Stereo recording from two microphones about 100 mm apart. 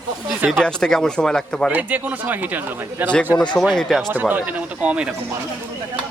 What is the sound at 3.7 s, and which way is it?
Speech, 5° left (ahead or behind).